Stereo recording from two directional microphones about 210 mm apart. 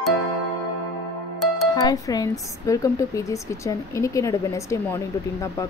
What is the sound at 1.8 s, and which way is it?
A woman's voice, 15° left (ahead or behind).